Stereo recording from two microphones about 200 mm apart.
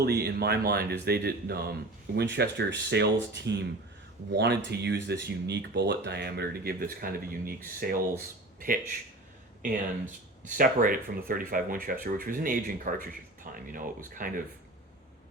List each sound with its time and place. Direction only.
0.0 s speech: 50° right (ahead or behind)
10.4 s speech: 45° right (ahead or behind)